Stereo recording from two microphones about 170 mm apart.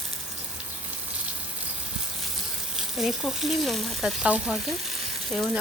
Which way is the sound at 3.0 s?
Centre (ahead or behind).